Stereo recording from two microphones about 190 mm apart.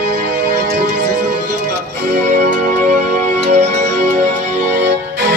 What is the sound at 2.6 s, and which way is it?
Music, 45° right (ahead or behind).